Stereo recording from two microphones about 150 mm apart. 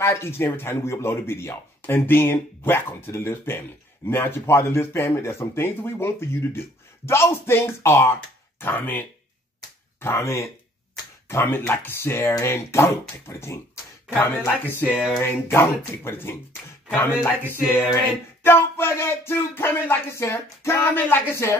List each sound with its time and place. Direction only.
0.0 s speech: 20° left (ahead or behind)